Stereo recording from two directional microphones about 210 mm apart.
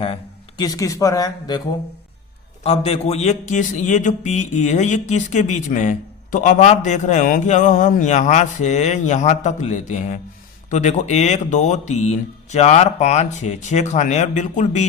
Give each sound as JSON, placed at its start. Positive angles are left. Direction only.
{"t": 0.0, "sound": "speech", "side_deg": 25}
{"t": 2.6, "sound": "a man's voice", "side_deg": 30}